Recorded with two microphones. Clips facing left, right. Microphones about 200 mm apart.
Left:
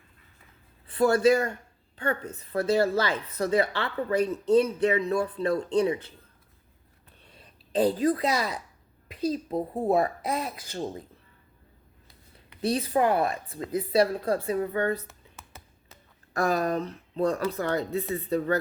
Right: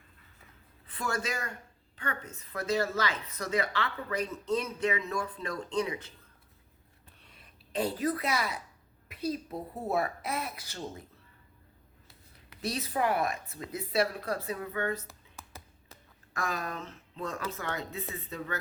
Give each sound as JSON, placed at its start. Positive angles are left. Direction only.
{"t": 0.9, "sound": "a man's voice", "side_deg": 35}
{"t": 7.3, "sound": "a woman's voice", "side_deg": 30}
{"t": 9.6, "sound": "a woman's voice", "side_deg": 50}
{"t": 9.9, "sound": "speech", "side_deg": 25}
{"t": 12.6, "sound": "speech", "side_deg": 30}
{"t": 15.0, "sound": "a sound", "side_deg": 0}
{"t": 16.3, "sound": "speech", "side_deg": 35}